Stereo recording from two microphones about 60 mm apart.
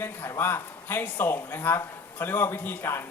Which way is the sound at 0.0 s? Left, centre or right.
Left.